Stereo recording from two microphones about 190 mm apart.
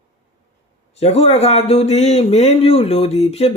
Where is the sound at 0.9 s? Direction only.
35° left (ahead or behind).